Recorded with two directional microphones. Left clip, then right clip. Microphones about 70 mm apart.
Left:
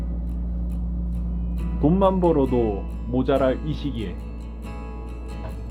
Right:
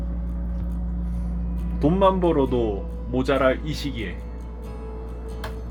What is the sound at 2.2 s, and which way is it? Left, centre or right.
Speech, centre.